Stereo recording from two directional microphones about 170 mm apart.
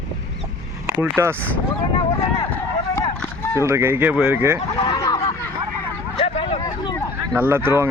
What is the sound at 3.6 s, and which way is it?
Speech, 15° right (ahead or behind).